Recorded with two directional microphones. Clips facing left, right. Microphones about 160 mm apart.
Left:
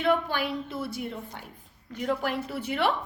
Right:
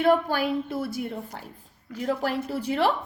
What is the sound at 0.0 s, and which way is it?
Speech, 40° right (ahead or behind).